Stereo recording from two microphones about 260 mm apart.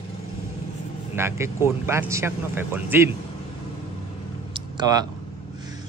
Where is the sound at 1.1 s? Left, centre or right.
Centre.